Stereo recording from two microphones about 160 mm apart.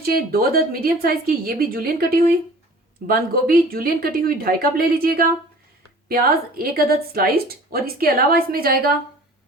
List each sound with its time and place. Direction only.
0.0 s a woman's voice: 65° right (ahead or behind)